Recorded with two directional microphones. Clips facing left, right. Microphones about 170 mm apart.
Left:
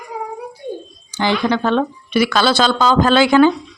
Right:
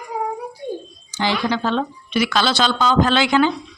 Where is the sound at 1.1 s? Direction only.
55° left (ahead or behind).